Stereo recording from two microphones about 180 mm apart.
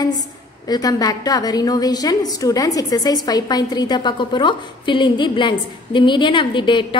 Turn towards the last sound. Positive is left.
turn(degrees=25)  # may be behind; listen again after turning